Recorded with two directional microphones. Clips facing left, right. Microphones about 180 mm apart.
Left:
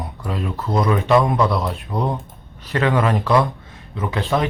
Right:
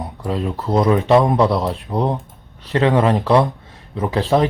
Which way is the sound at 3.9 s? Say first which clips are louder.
Right 4 dB; 35° right (ahead or behind).